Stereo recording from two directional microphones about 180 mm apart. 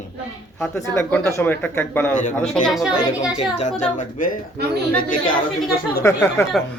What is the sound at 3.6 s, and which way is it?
Speech, 40° left (ahead or behind).